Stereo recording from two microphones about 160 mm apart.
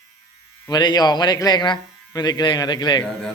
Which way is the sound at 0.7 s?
25° left (ahead or behind).